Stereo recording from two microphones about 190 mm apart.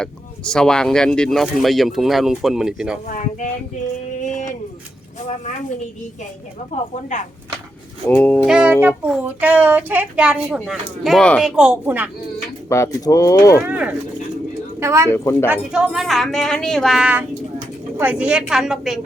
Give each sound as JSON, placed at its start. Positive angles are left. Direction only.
{"t": 0.0, "sound": "speech", "side_deg": 5}
{"t": 3.1, "sound": "speech", "side_deg": 40}
{"t": 4.2, "sound": "a sound", "side_deg": 40}
{"t": 8.0, "sound": "speech", "side_deg": 10}
{"t": 8.4, "sound": "speech", "side_deg": -5}
{"t": 12.6, "sound": "speech", "side_deg": 15}
{"t": 13.6, "sound": "speech", "side_deg": -5}
{"t": 15.1, "sound": "speech", "side_deg": 15}
{"t": 15.4, "sound": "speech", "side_deg": -5}